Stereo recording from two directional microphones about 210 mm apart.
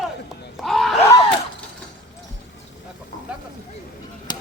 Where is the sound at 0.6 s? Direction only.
Centre (ahead or behind).